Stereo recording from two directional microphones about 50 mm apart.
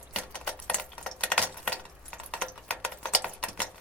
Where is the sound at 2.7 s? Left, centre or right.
Left.